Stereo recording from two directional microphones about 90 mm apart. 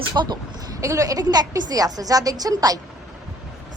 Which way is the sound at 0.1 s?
45° right (ahead or behind).